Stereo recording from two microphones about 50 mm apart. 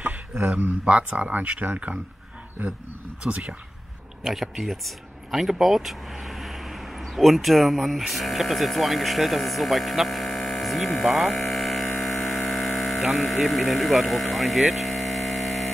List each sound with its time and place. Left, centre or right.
0.4 s speech: right
3.3 s speech: right
4.2 s speech: centre
11.0 s mains hum: centre
12.0 s hum: centre